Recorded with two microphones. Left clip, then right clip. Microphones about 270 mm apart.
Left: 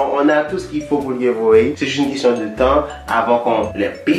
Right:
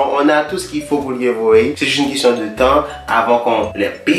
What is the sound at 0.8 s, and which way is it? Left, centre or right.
Speech, left.